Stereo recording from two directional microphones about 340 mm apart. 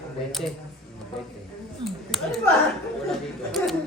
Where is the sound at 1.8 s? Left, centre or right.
Centre.